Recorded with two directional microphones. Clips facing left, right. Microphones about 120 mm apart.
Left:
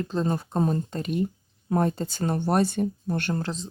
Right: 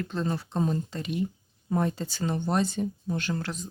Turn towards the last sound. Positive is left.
turn(degrees=30)  # may be behind; listen again after turning